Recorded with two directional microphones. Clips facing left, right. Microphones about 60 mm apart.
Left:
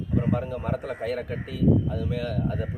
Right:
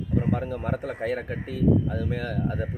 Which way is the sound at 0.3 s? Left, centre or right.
Right.